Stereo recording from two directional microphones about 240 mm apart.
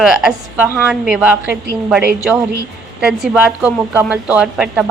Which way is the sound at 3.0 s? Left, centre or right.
Centre.